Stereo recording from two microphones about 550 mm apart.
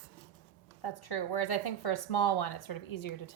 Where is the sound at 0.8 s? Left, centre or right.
Left.